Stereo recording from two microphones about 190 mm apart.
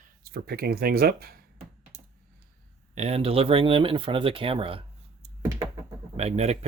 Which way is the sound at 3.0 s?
35° right (ahead or behind).